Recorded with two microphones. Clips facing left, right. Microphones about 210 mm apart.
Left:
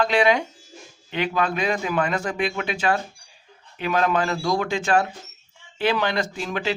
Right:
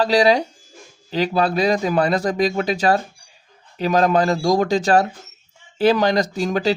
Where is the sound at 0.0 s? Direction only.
35° right (ahead or behind).